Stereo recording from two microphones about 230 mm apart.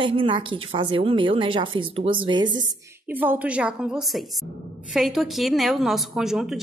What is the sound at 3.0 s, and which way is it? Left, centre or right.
A woman's voice, centre.